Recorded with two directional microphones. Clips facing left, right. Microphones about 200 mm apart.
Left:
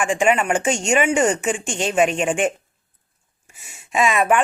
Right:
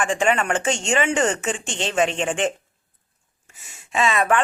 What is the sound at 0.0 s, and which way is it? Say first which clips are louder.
A woman's voice: left 2 dB; 10° left (ahead or behind).